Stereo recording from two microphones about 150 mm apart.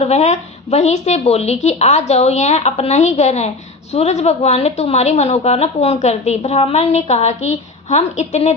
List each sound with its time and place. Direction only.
0.0 s a woman's voice: 45° left (ahead or behind)